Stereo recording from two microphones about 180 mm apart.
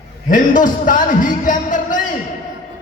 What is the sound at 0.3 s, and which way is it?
A man's voice, 45° left (ahead or behind).